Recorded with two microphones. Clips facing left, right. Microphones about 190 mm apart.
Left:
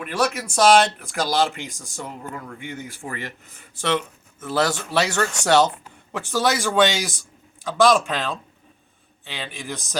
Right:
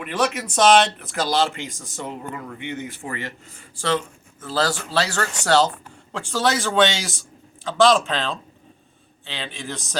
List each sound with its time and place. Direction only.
0.0 s speech: 5° left (ahead or behind)
2.3 s speech: centre (ahead or behind)
4.4 s speech: 20° left (ahead or behind)